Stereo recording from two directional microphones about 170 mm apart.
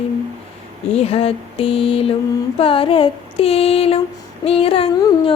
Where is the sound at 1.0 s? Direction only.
35° left (ahead or behind).